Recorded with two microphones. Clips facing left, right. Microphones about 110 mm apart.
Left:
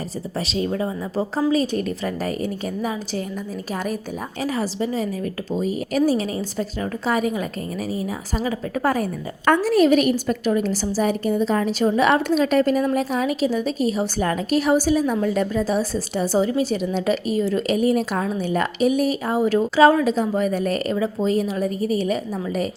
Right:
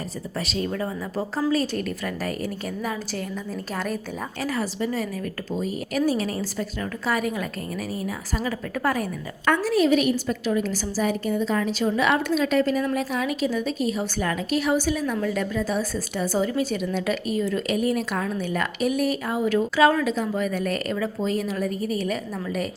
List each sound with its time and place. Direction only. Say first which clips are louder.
0.4 s a woman's voice: left 4 dB; 25° left (ahead or behind)
4.4 s a woman's voice: left 3 dB; 20° left (ahead or behind)
9.5 s a woman's voice: left 4 dB; 55° left (ahead or behind); by 19.4 s 25° left (ahead or behind)
19.4 s a woman's voice: left 4 dB; 35° left (ahead or behind)